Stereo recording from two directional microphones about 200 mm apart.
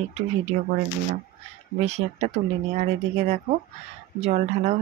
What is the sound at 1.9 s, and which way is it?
Speech, 35° right (ahead or behind).